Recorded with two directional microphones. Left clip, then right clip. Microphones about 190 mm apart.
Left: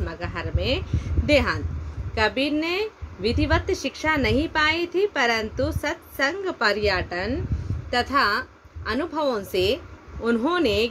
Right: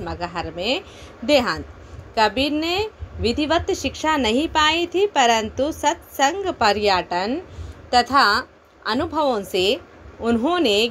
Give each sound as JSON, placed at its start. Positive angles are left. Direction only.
{"t": 0.0, "sound": "a woman's voice", "side_deg": -20}